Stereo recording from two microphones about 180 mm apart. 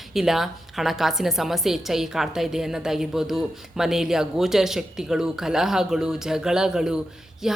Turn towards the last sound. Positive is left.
turn(degrees=0)  # may be behind; listen again after turning